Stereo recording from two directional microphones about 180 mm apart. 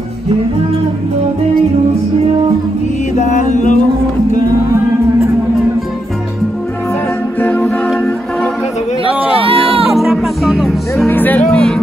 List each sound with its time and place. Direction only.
3.2 s music: 40° left (ahead or behind)
7.3 s music: 10° left (ahead or behind)
9.4 s a sound: 30° right (ahead or behind)
9.9 s music: centre (ahead or behind)
11.1 s music: 10° left (ahead or behind)